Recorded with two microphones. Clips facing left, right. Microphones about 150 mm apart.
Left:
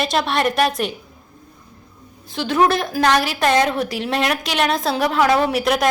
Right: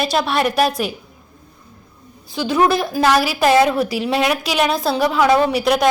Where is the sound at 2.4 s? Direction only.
Centre (ahead or behind).